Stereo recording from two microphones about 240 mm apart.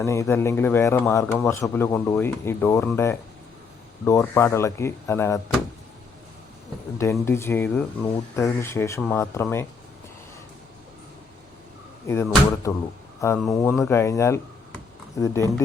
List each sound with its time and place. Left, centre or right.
0.0 s speech: centre
7.0 s speech: centre
12.7 s speech: centre